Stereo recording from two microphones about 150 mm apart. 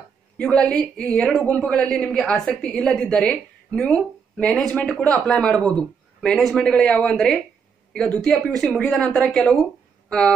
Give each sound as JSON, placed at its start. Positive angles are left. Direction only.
{"t": 0.4, "sound": "a woman's voice", "side_deg": 5}